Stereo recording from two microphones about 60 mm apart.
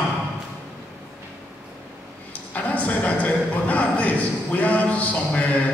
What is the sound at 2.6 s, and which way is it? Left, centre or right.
A man's voice, left.